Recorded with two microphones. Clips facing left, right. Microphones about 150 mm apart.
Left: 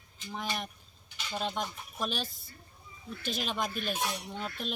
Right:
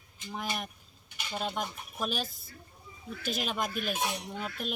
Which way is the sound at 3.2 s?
5° right (ahead or behind).